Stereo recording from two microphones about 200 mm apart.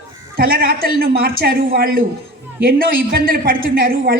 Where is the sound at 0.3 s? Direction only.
50° right (ahead or behind).